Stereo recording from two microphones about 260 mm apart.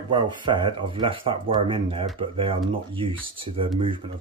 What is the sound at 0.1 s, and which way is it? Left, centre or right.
Speech, centre.